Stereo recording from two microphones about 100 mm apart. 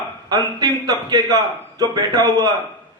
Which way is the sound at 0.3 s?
40° right (ahead or behind).